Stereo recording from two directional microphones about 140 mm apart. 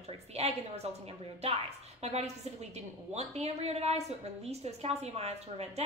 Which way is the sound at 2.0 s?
50° right (ahead or behind).